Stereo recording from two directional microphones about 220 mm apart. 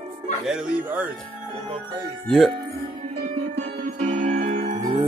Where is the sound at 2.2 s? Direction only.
Centre (ahead or behind).